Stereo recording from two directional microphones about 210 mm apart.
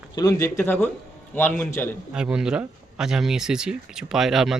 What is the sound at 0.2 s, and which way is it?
Speech, 15° left (ahead or behind).